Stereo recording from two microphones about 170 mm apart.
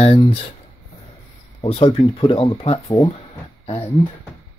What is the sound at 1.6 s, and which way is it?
Speech, 35° left (ahead or behind).